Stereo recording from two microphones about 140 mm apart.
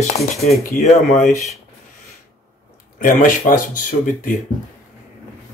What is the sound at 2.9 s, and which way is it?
Speech, 75° left (ahead or behind).